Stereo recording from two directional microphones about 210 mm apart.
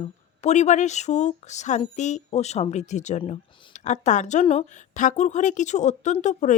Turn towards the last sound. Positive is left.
turn(degrees=35)  # may be behind; listen again after turning